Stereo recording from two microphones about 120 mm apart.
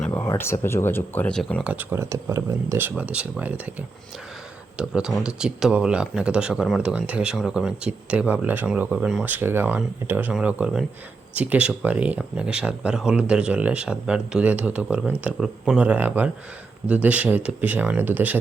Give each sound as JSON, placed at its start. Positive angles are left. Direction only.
{"t": 0.0, "sound": "a sound", "side_deg": 15}
{"t": 0.3, "sound": "speech", "side_deg": 20}
{"t": 1.6, "sound": "speech", "side_deg": -15}
{"t": 4.8, "sound": "speech", "side_deg": -5}